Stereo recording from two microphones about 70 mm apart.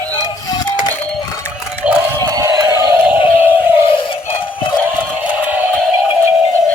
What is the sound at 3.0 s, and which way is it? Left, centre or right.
Synthetic singing, right.